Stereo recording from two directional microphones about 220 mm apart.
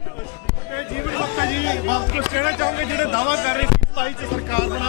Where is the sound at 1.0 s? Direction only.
15° left (ahead or behind).